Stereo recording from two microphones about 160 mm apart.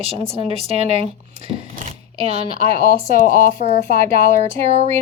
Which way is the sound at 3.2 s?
60° left (ahead or behind).